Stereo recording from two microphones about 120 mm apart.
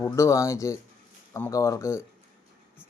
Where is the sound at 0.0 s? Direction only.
25° left (ahead or behind).